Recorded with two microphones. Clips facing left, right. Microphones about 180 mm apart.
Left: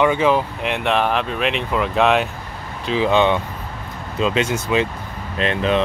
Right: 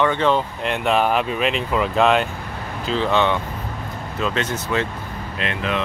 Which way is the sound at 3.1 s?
15° left (ahead or behind).